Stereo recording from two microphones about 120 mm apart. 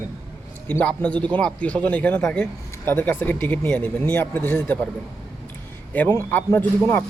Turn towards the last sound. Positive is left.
turn(degrees=15)  # may be behind; listen again after turning